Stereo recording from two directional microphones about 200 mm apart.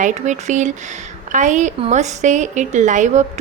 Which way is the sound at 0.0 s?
35° right (ahead or behind).